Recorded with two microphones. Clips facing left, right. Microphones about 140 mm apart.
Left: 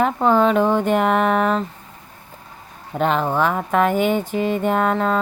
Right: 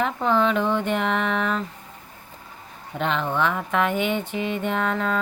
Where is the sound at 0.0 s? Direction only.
45° left (ahead or behind).